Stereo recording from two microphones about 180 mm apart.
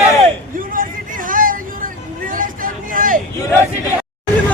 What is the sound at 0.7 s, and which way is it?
Vehicle, 50° right (ahead or behind).